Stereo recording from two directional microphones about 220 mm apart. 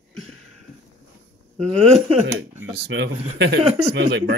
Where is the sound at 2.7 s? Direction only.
55° right (ahead or behind).